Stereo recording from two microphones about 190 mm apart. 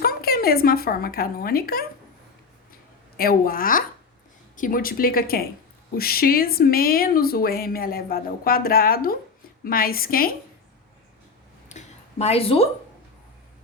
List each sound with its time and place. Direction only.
0.0 s speech: 50° left (ahead or behind)
3.2 s speech: 50° left (ahead or behind)
11.7 s a sound: 40° left (ahead or behind)
12.2 s speech: 30° left (ahead or behind)